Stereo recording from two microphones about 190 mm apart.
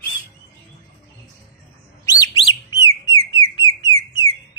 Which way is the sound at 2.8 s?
25° left (ahead or behind).